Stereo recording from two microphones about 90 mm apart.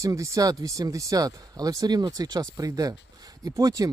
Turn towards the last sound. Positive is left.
turn(degrees=-45)  # may be behind; listen again after turning